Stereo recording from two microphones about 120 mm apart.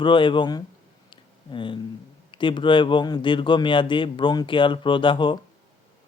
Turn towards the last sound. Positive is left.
turn(degrees=45)  # may be behind; listen again after turning